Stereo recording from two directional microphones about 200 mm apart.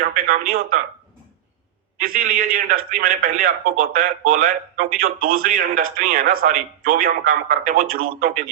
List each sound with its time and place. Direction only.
0.0 s a man's voice: 45° right (ahead or behind)
2.0 s a man's voice: 45° right (ahead or behind)